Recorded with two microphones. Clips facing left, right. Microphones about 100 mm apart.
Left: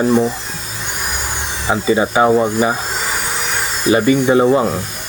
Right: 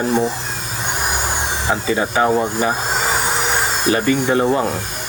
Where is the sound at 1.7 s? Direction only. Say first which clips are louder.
Left 5 dB; 20° left (ahead or behind).